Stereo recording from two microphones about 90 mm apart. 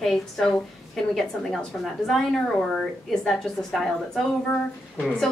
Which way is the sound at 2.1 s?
5° left (ahead or behind).